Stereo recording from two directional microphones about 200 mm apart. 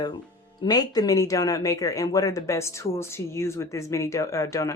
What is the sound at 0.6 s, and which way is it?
Speech, 20° left (ahead or behind).